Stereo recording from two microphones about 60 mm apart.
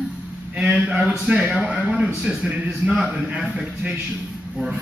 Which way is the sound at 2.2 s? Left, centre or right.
Centre.